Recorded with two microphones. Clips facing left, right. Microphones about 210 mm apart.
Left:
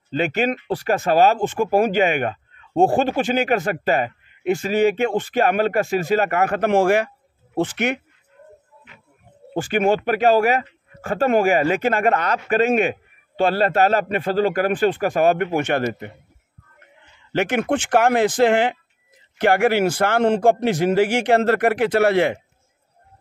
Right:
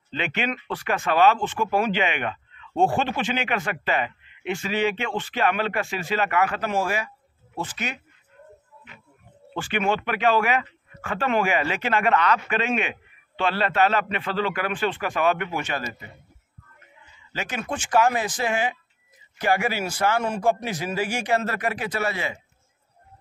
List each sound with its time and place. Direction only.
0.1 s a man's voice: 40° left (ahead or behind); by 8.0 s 65° left (ahead or behind)
9.5 s a man's voice: 40° left (ahead or behind); by 22.4 s 65° left (ahead or behind)